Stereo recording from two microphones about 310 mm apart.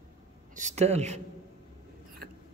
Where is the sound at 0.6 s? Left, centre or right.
Right.